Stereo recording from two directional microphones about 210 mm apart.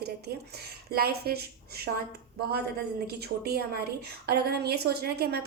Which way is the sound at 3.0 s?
50° right (ahead or behind).